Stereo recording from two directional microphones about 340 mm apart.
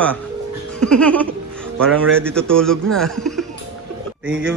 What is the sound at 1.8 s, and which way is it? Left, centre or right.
A man's voice, centre.